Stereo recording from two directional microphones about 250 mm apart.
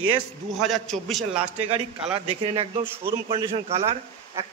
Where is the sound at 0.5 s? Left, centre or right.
Centre.